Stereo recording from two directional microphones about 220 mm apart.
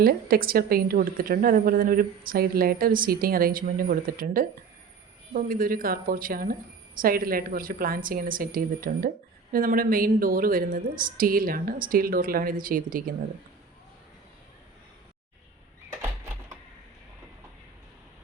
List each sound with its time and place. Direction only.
0.0 s a woman's voice: 45° right (ahead or behind)